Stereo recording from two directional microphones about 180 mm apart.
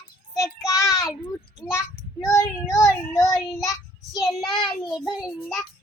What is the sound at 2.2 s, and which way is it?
Child singing, 20° left (ahead or behind).